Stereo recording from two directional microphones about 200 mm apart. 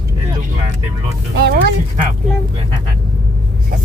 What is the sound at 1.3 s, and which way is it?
Speech, 55° right (ahead or behind).